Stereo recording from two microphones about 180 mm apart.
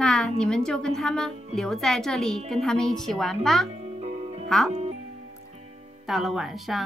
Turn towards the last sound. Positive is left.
turn(degrees=0)  # may be behind; listen again after turning